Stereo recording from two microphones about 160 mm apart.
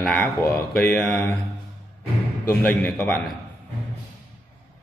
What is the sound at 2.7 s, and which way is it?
Speech, 15° left (ahead or behind).